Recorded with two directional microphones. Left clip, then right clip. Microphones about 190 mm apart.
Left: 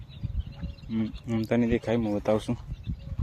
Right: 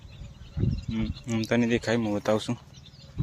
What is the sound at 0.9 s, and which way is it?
Speech, 10° left (ahead or behind).